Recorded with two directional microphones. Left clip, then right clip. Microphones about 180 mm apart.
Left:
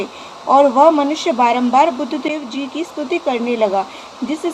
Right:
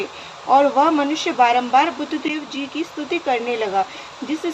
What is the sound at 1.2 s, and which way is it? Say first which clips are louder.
Speech: left 1 dB; 50° left (ahead or behind).